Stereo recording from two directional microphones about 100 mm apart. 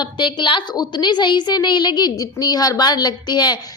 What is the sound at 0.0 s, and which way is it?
A woman's voice, 50° left (ahead or behind).